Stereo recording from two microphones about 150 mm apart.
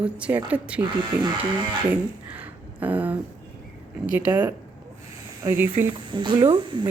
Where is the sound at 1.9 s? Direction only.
10° right (ahead or behind).